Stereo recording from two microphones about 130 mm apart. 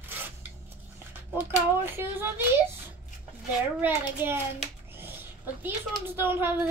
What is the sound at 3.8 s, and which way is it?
Speech, 15° right (ahead or behind).